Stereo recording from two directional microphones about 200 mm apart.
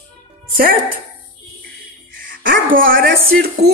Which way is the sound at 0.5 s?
45° right (ahead or behind).